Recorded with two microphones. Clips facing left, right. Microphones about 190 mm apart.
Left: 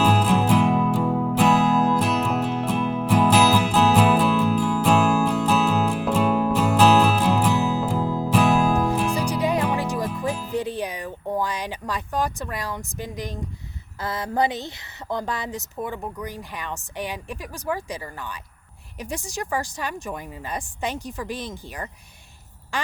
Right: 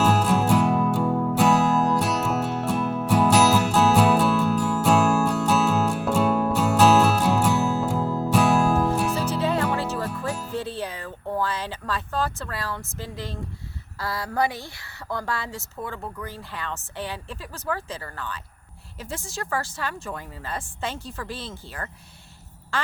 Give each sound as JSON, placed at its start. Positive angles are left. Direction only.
{"t": 0.0, "sound": "music", "side_deg": 10}
{"t": 14.0, "sound": "a sound", "side_deg": 20}
{"t": 15.1, "sound": "speech", "side_deg": 20}